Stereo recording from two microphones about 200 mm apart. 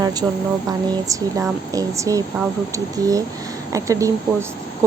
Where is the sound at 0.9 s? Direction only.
15° right (ahead or behind).